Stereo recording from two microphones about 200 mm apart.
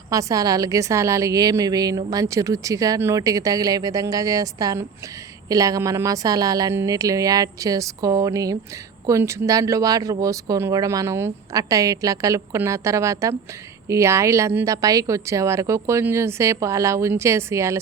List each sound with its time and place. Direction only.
0.1 s a woman's voice: 15° right (ahead or behind)